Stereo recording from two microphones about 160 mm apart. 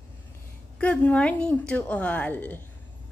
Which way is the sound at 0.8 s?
10° left (ahead or behind).